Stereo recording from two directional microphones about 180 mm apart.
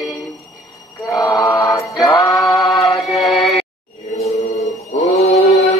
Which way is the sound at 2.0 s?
25° left (ahead or behind).